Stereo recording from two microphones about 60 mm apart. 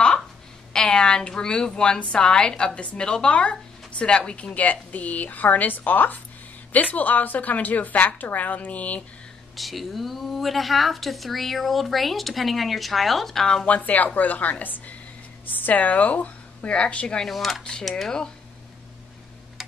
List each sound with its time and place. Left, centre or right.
0.7 s a woman's voice: centre
9.6 s speech: centre
13.7 s a woman's voice: left
17.3 s speech: centre